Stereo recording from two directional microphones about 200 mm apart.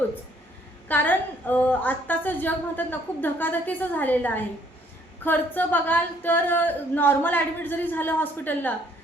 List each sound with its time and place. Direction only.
0.9 s a woman's voice: 10° left (ahead or behind)